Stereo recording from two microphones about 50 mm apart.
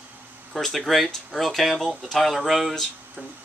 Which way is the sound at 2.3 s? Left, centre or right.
Centre.